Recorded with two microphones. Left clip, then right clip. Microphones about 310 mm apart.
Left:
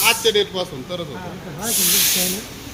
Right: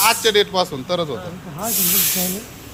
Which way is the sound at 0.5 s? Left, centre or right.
Right.